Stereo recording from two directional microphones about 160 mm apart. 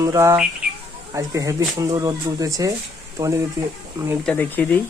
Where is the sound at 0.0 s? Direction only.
20° right (ahead or behind).